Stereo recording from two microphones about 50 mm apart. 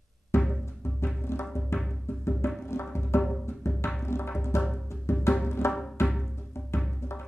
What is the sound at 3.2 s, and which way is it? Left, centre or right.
Music, centre.